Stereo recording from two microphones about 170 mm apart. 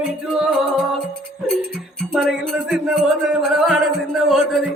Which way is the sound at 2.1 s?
5° left (ahead or behind).